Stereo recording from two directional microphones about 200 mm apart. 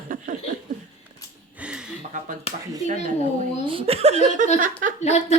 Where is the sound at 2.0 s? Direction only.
40° right (ahead or behind).